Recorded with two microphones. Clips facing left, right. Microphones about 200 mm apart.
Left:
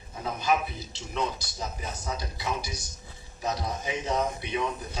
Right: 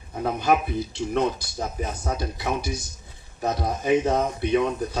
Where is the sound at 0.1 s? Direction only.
60° right (ahead or behind).